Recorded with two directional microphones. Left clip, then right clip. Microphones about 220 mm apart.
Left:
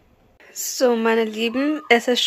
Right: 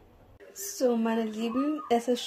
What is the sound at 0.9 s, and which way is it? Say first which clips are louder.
Speech: left 11 dB; 30° left (ahead or behind).